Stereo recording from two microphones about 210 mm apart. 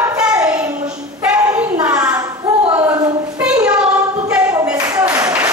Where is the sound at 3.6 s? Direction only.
5° right (ahead or behind).